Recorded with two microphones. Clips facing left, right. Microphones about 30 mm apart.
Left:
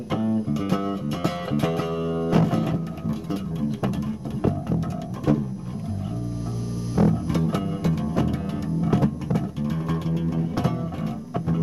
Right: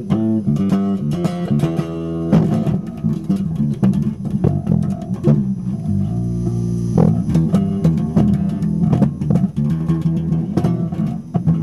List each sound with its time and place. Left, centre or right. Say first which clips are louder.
0.1 s music: right 7 dB; centre
7.1 s music: right 6 dB; left